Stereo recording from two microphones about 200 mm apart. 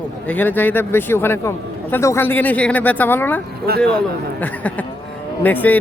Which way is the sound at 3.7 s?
50° right (ahead or behind).